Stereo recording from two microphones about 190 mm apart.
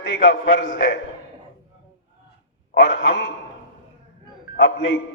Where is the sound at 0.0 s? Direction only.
65° left (ahead or behind).